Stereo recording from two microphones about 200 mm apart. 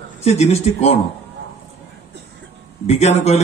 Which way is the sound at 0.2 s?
30° left (ahead or behind).